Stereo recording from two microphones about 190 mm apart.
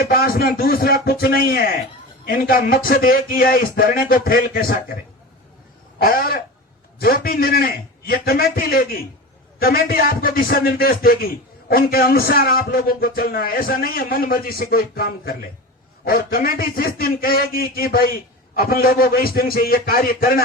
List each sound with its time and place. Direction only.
0.0 s a man's voice: 50° left (ahead or behind)
6.0 s a man's voice: 50° left (ahead or behind)